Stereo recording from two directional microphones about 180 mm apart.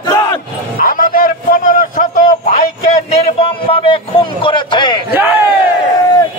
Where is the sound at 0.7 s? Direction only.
50° left (ahead or behind).